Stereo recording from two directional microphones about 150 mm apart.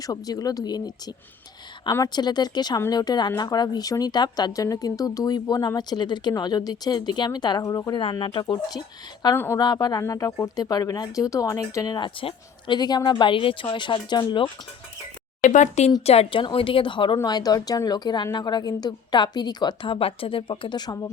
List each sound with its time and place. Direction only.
0.0 s a woman's voice: 25° left (ahead or behind)
9.3 s a woman's voice: 15° left (ahead or behind)
9.6 s a woman's voice: 25° left (ahead or behind)
15.4 s speech: 55° left (ahead or behind)
16.0 s a woman's voice: 40° left (ahead or behind)